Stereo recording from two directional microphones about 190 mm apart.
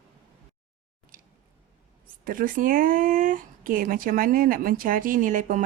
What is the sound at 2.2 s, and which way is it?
Speech, 45° right (ahead or behind).